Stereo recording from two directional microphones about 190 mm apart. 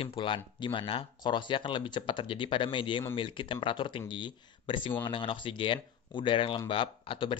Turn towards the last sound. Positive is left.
turn(degrees=25)  # may be behind; listen again after turning